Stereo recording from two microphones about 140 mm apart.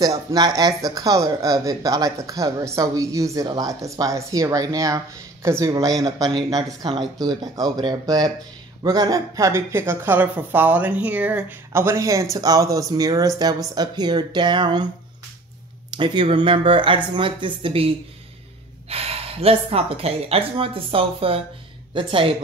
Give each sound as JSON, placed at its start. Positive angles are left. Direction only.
{"t": 0.0, "sound": "speech", "side_deg": -25}
{"t": 6.8, "sound": "speech", "side_deg": -35}
{"t": 15.9, "sound": "speech", "side_deg": -35}